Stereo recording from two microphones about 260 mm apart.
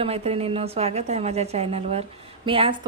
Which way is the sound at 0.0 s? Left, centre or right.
Right.